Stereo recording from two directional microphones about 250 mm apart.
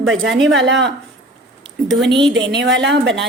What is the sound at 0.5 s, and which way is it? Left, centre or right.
Speech, right.